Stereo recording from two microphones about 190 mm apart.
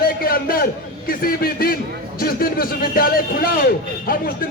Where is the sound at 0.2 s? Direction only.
50° left (ahead or behind).